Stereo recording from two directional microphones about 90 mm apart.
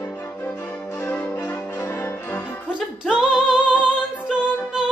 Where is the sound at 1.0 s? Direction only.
15° left (ahead or behind).